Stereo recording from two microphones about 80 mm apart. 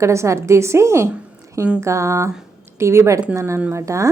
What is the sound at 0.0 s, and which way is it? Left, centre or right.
A woman's voice, right.